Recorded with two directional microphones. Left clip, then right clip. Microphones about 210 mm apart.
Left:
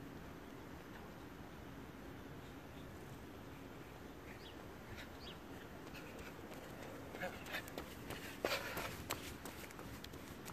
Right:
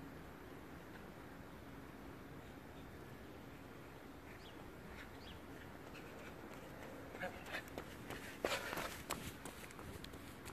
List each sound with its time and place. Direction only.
7.2 s run: centre (ahead or behind)
8.4 s walk: 20° right (ahead or behind)